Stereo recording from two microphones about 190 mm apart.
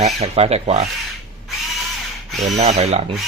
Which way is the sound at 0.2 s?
35° right (ahead or behind).